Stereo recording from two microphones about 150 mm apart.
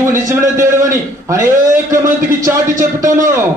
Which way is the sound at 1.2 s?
20° right (ahead or behind).